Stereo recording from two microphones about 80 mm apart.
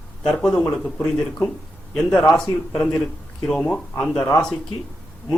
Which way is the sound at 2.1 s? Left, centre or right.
Centre.